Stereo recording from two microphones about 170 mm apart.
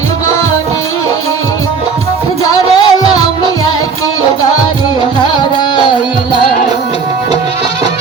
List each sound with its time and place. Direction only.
2.4 s music: 20° left (ahead or behind)
5.2 s music: 25° left (ahead or behind)